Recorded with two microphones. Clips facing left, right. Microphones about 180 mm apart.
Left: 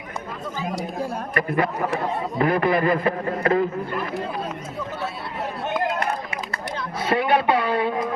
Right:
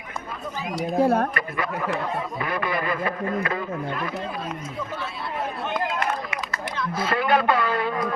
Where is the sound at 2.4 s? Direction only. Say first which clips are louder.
Left 10 dB; 50° left (ahead or behind).